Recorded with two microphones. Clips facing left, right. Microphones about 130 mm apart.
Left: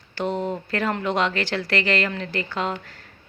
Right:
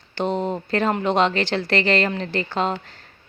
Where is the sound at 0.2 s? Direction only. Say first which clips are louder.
Right 2 dB; 25° right (ahead or behind).